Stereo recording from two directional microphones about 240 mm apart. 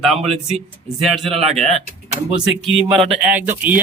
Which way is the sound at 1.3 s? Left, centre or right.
Right.